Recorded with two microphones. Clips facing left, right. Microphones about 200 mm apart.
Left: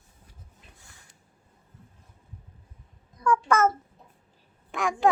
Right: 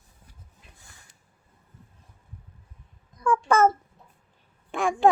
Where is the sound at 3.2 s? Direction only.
30° right (ahead or behind).